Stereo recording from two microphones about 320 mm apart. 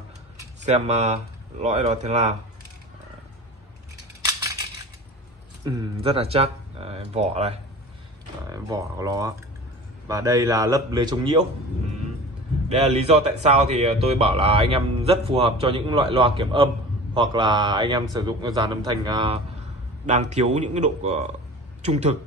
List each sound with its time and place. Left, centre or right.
0.7 s speech: right
5.7 s speech: centre
12.6 s speech: centre